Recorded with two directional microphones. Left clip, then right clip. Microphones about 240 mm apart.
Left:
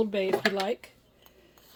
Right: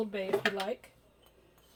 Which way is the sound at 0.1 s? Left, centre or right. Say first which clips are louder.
Left 7 dB; left.